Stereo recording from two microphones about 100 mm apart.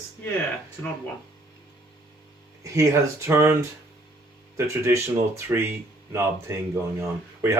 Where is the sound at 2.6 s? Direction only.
30° right (ahead or behind).